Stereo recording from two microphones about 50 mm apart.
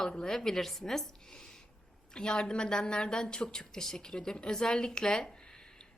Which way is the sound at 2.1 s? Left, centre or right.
Centre.